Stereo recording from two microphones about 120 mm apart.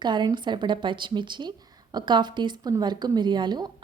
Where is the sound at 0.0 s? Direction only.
40° right (ahead or behind).